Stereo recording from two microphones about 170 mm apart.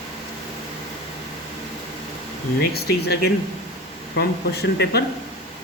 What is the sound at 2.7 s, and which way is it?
Speech, 70° left (ahead or behind).